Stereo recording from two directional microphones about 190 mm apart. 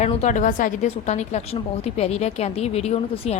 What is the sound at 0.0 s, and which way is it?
A woman's voice, 35° left (ahead or behind).